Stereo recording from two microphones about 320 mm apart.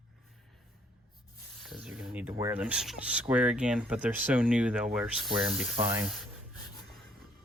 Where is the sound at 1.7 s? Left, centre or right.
Centre.